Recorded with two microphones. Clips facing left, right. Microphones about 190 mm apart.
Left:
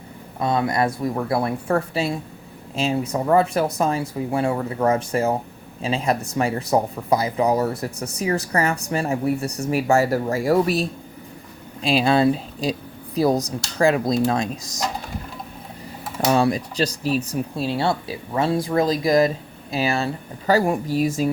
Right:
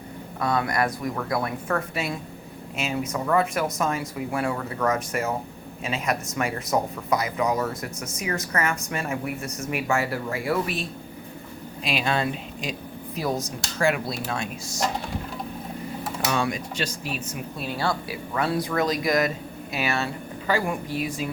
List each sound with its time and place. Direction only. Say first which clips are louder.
0.3 s speech: left 3 dB; 25° left (ahead or behind)
16.2 s speech: left 8 dB; 35° left (ahead or behind)